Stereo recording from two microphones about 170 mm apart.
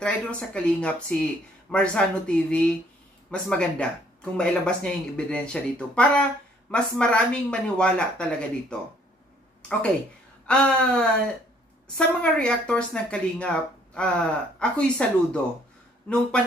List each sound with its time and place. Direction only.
0.0 s a woman's voice: 5° left (ahead or behind)
9.6 s a sound: 5° left (ahead or behind)
10.4 s a woman's voice: 5° left (ahead or behind)